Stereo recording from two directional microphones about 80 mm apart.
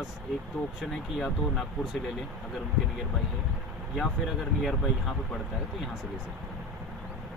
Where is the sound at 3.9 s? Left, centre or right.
Centre.